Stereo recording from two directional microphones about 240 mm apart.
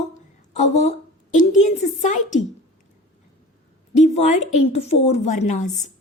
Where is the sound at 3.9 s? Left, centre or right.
Left.